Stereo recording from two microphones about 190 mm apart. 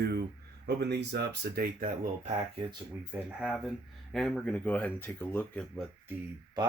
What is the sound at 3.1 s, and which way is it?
Speech, centre (ahead or behind).